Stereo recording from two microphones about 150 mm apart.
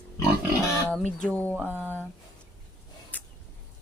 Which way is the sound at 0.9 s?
10° left (ahead or behind).